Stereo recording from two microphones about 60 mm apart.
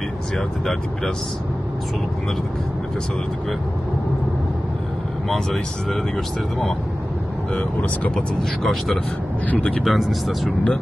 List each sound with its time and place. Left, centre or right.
5.3 s speech: centre
7.5 s speech: left
8.4 s speech: centre
9.5 s speech: left
9.8 s speech: centre